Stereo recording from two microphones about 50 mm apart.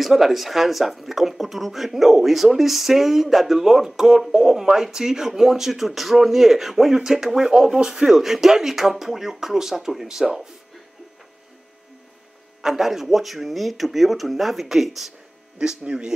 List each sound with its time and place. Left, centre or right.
0.0 s speech: centre
12.6 s speech: centre
15.8 s a man's voice: centre